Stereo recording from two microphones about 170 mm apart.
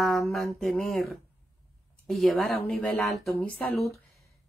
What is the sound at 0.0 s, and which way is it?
Speech, centre (ahead or behind).